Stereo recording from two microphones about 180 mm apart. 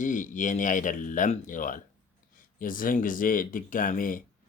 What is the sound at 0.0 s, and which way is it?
Speech, 45° left (ahead or behind).